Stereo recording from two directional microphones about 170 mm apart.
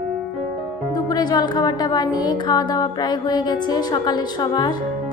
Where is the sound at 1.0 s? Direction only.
25° left (ahead or behind).